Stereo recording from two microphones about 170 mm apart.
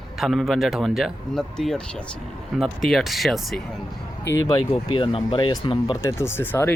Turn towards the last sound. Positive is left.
turn(degrees=10)  # may be behind; listen again after turning